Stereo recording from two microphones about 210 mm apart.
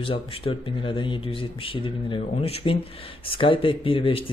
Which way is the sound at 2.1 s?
25° left (ahead or behind).